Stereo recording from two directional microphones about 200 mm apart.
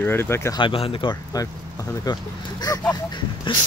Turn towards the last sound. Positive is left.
turn(degrees=20)  # may be behind; listen again after turning